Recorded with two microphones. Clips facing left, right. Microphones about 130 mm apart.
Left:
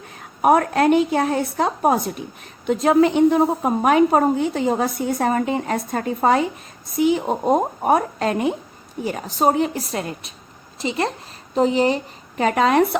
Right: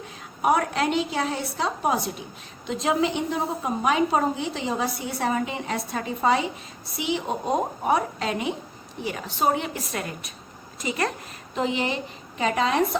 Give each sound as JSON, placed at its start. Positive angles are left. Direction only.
{"t": 0.2, "sound": "a woman's voice", "side_deg": 50}
{"t": 11.5, "sound": "a woman's voice", "side_deg": 35}
{"t": 12.4, "sound": "a woman's voice", "side_deg": 55}